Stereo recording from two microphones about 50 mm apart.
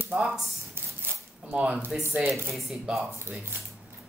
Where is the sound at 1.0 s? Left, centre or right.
Right.